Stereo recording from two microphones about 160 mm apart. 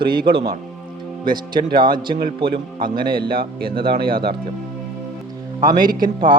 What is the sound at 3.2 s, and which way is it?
Speech, 70° right (ahead or behind).